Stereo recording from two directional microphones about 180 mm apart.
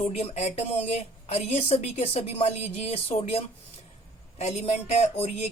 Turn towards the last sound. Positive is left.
turn(degrees=35)  # may be behind; listen again after turning